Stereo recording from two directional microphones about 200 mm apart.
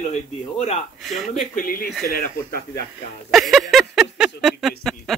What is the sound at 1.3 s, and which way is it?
Speech, 45° left (ahead or behind).